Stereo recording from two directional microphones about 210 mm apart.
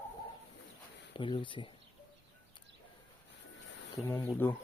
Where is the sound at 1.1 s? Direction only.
25° left (ahead or behind).